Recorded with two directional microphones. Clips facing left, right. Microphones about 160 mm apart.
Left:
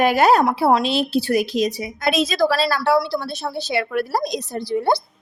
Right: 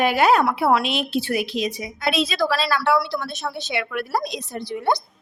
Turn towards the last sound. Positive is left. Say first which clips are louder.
# left 3 dB
turn(degrees=35)  # may be behind; listen again after turning